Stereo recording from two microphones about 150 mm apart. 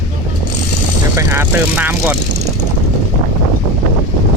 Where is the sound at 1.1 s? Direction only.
15° right (ahead or behind).